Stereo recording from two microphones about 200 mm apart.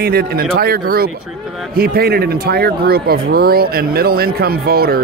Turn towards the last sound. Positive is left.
turn(degrees=-50)  # may be behind; listen again after turning